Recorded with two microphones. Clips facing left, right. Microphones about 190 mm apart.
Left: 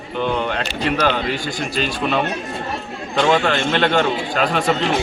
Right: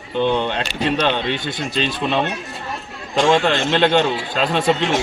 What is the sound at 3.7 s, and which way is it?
A man's voice, 25° right (ahead or behind).